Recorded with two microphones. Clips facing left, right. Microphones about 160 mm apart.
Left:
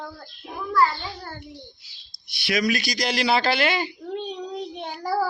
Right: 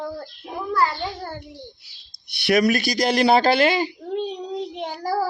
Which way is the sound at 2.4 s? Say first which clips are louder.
Right 6 dB; 60° right (ahead or behind).